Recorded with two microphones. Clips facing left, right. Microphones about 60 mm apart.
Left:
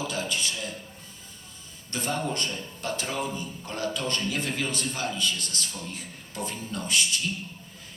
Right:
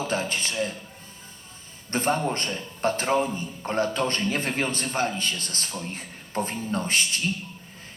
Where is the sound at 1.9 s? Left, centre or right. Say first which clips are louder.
Right 5 dB; right.